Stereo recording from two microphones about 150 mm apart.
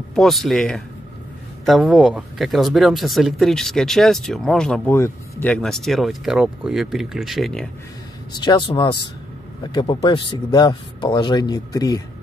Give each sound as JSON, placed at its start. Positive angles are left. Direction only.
{"t": 0.1, "sound": "speech", "side_deg": 0}
{"t": 4.9, "sound": "speech", "side_deg": 15}
{"t": 8.4, "sound": "a man's voice", "side_deg": 30}